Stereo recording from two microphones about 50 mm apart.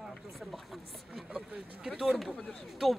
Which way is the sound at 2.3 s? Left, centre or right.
Left.